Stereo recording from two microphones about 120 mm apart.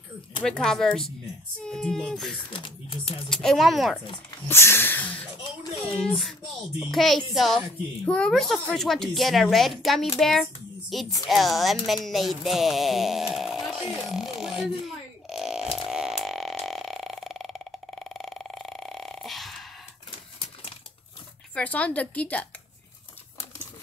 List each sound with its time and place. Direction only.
0.4 s speech: 5° left (ahead or behind)
2.5 s speech: 40° left (ahead or behind)
3.3 s speech: centre (ahead or behind)
4.5 s speech: 20° left (ahead or behind); by 14.7 s 5° right (ahead or behind)
15.2 s burping: centre (ahead or behind)
21.5 s speech: 10° left (ahead or behind)